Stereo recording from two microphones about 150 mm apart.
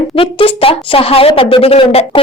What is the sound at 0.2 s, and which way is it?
A woman's voice, 35° left (ahead or behind).